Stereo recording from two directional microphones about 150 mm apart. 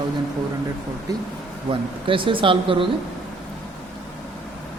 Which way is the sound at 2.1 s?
35° right (ahead or behind).